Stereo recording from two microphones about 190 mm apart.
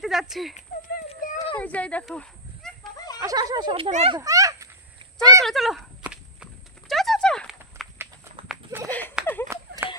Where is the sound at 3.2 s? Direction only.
20° right (ahead or behind); by 4.1 s 35° right (ahead or behind).